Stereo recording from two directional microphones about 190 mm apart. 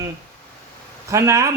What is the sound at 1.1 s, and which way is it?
Speech, 15° right (ahead or behind).